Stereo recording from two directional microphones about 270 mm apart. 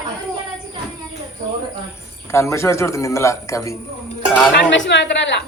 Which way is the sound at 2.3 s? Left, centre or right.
Centre.